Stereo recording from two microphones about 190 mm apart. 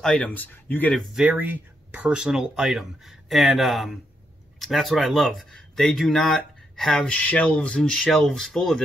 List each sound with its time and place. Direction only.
0.0 s speech: 5° left (ahead or behind)
1.1 s speech: 5° right (ahead or behind)